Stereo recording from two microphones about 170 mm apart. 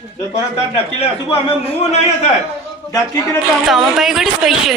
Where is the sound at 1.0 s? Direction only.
35° left (ahead or behind).